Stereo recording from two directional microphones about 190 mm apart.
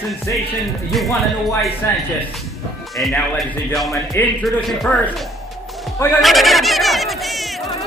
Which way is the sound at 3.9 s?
15° left (ahead or behind).